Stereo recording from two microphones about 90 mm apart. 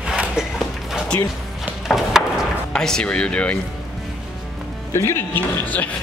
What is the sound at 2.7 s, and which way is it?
Speech, 10° left (ahead or behind).